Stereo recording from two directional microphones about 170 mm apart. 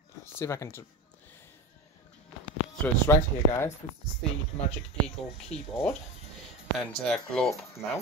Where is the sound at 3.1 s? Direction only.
15° left (ahead or behind).